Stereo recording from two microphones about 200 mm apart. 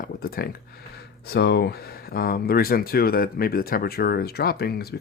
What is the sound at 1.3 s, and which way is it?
Speech, 55° left (ahead or behind).